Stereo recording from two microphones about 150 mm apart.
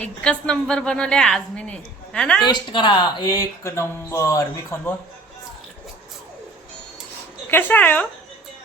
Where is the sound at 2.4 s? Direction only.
30° left (ahead or behind); by 5.0 s 15° left (ahead or behind).